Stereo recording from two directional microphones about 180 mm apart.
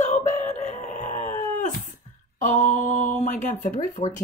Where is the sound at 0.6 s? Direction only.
45° left (ahead or behind).